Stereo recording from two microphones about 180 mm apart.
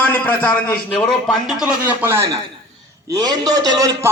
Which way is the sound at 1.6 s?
5° right (ahead or behind).